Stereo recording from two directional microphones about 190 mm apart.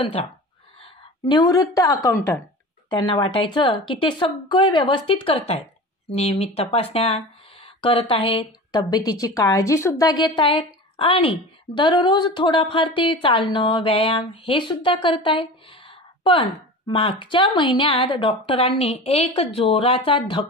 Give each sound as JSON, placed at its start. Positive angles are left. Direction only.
{"t": 0.0, "sound": "a woman's voice", "side_deg": 30}